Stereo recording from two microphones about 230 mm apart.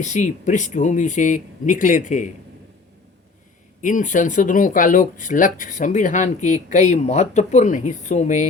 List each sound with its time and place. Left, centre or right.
0.0 s speech: left
3.8 s speech: left